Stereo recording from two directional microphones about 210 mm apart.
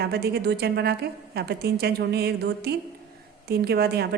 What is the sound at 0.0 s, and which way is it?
A woman's voice, 50° right (ahead or behind).